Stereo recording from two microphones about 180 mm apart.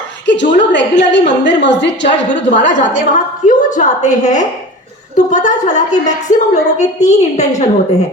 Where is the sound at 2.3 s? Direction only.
45° left (ahead or behind).